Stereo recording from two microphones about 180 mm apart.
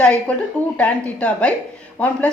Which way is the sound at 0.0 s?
5° left (ahead or behind).